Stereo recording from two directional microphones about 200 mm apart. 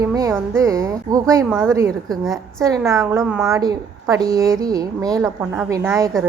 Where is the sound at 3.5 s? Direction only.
15° right (ahead or behind).